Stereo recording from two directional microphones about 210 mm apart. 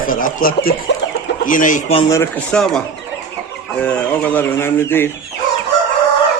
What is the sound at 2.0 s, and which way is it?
Speech, 15° left (ahead or behind).